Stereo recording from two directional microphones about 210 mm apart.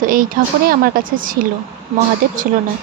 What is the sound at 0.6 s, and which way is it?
Speech, 40° right (ahead or behind).